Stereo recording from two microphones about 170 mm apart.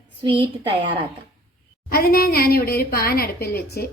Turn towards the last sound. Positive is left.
turn(degrees=65)  # may be behind; listen again after turning